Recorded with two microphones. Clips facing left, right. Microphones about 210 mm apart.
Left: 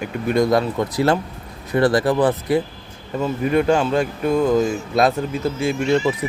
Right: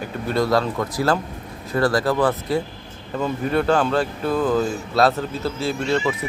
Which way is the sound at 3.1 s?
5° left (ahead or behind).